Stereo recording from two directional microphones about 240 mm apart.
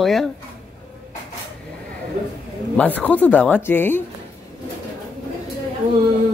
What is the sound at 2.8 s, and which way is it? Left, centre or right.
Speech, centre.